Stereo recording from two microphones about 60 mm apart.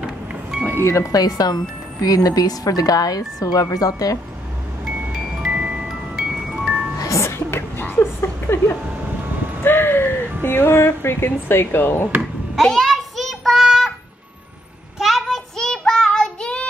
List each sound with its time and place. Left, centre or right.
0.7 s speech: left
1.1 s speech: left
4.8 s music: centre
5.5 s glockenspiel: centre
6.5 s music: centre
7.2 s music: left
8.0 s a sound: left
9.6 s speech: left
12.6 s child singing: centre
13.7 s music: centre
15.0 s child singing: centre